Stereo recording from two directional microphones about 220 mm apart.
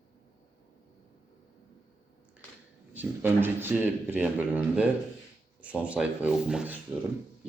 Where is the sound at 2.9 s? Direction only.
10° right (ahead or behind).